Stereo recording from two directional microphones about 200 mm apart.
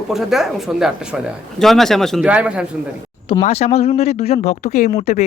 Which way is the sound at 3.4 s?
35° left (ahead or behind).